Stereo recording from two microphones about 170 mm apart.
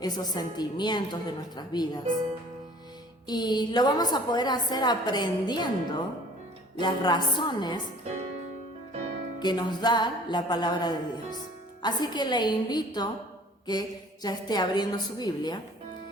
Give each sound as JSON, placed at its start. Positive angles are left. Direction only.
{"t": 0.0, "sound": "a woman's voice", "side_deg": 25}
{"t": 3.2, "sound": "a woman's voice", "side_deg": 25}
{"t": 9.4, "sound": "a woman's voice", "side_deg": 25}